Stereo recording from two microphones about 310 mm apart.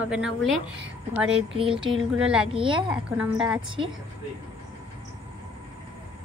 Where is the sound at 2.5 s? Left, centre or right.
Centre.